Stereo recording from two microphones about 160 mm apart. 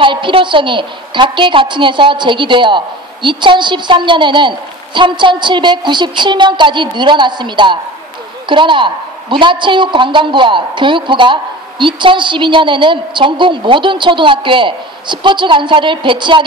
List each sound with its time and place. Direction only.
0.0 s a woman's voice: 30° right (ahead or behind)